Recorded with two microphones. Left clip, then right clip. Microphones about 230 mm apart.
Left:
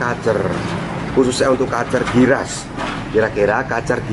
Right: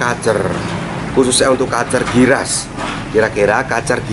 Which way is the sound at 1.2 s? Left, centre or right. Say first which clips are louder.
Right 2 dB; left.